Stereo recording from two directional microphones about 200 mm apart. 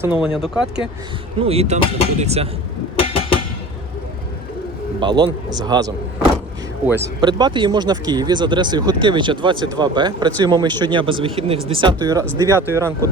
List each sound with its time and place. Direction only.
0.0 s speech: 5° right (ahead or behind)
1.4 s speech: 30° right (ahead or behind)
2.9 s a sound: 25° left (ahead or behind)
4.9 s speech: 25° right (ahead or behind)
7.2 s speech: 20° right (ahead or behind)